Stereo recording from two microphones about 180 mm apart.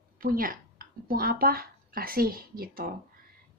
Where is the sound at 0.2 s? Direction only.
50° right (ahead or behind).